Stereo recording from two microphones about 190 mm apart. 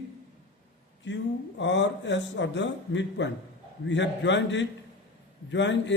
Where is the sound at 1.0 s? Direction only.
70° left (ahead or behind).